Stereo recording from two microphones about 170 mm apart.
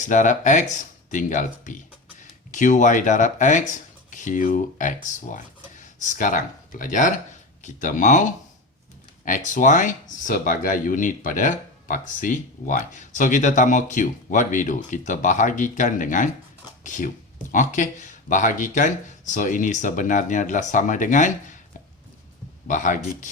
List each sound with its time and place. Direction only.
0.0 s speech: 45° left (ahead or behind)
22.6 s speech: 50° left (ahead or behind)